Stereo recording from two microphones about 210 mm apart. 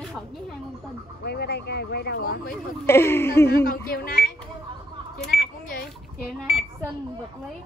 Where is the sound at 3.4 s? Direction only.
45° left (ahead or behind).